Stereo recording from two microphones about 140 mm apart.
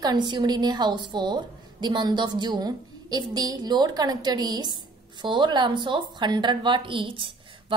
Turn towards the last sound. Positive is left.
turn(degrees=-35)  # may be behind; listen again after turning